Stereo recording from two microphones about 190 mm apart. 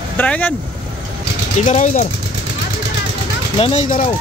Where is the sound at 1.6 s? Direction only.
40° left (ahead or behind).